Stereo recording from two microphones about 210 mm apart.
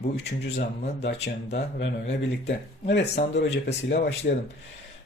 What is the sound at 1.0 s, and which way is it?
Speech, 55° left (ahead or behind).